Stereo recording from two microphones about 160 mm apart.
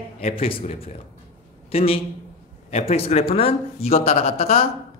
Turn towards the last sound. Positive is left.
turn(degrees=40)  # may be behind; listen again after turning